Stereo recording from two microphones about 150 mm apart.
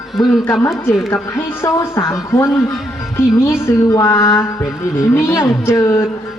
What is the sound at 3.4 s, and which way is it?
A woman's voice, 20° left (ahead or behind).